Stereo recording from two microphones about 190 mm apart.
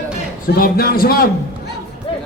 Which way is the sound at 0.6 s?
50° left (ahead or behind).